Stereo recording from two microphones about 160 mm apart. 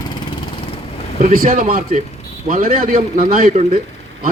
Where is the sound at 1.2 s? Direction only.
55° right (ahead or behind).